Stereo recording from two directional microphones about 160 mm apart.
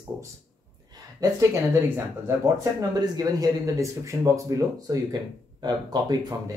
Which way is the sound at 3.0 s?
25° right (ahead or behind).